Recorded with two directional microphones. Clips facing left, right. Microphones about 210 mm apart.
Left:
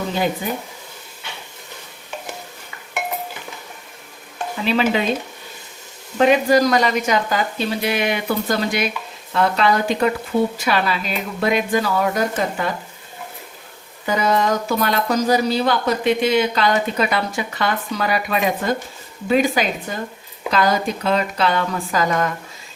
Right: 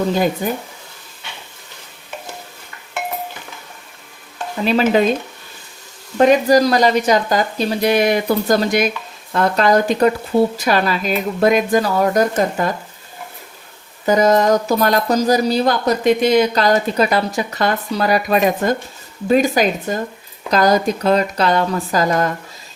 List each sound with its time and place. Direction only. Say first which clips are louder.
0.4 s a woman's voice: right 4 dB; 45° right (ahead or behind)
4.6 s a woman's voice: right 4 dB; 45° right (ahead or behind)
6.1 s a woman's voice: right 3 dB; 40° right (ahead or behind)
14.0 s speech: right 6 dB; 40° right (ahead or behind)